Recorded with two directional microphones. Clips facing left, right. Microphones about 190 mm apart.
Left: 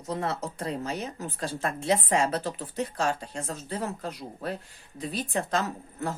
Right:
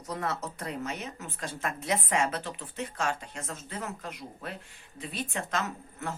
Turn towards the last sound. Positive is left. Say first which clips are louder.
# left 4 dB
turn(degrees=35)  # may be behind; listen again after turning